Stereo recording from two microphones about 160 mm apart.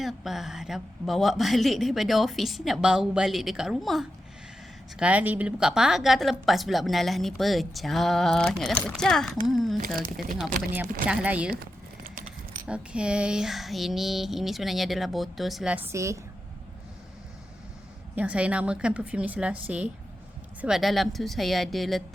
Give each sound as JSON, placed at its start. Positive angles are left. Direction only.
{"t": 0.0, "sound": "a woman's voice", "side_deg": 0}
{"t": 9.7, "sound": "speech", "side_deg": -65}
{"t": 11.1, "sound": "a woman's voice", "side_deg": -5}
{"t": 11.5, "sound": "a sound", "side_deg": -65}
{"t": 12.6, "sound": "a woman's voice", "side_deg": -5}
{"t": 18.1, "sound": "a woman's voice", "side_deg": -10}